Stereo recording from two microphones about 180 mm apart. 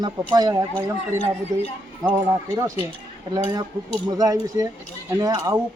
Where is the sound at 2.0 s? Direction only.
15° right (ahead or behind).